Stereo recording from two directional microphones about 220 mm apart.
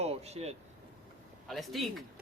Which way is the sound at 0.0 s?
30° right (ahead or behind).